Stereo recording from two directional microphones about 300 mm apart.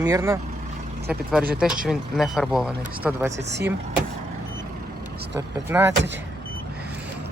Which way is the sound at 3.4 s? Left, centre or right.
Right.